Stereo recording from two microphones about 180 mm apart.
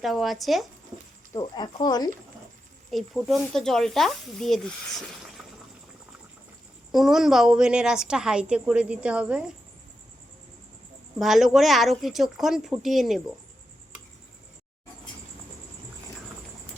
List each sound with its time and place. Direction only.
0.0 s a woman's voice: centre (ahead or behind)
1.3 s speech: 20° left (ahead or behind)
2.9 s a woman's voice: centre (ahead or behind)
6.9 s a woman's voice: centre (ahead or behind)
11.2 s a woman's voice: centre (ahead or behind)